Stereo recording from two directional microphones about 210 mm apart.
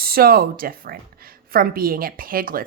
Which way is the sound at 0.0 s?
45° right (ahead or behind).